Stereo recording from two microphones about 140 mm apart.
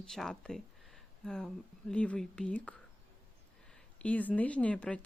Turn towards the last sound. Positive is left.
turn(degrees=10)  # may be behind; listen again after turning